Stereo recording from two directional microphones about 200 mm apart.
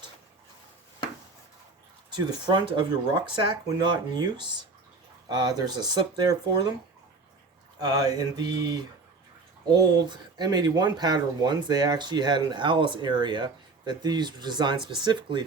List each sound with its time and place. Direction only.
2.5 s speech: 20° right (ahead or behind)
7.8 s speech: 20° right (ahead or behind)
10.3 s speech: 20° right (ahead or behind)